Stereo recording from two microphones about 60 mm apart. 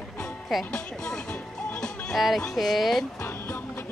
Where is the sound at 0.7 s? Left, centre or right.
Centre.